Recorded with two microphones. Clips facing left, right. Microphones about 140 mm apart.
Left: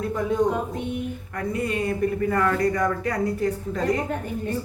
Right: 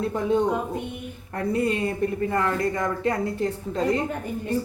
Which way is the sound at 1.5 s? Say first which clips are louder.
Right 1 dB; 30° right (ahead or behind).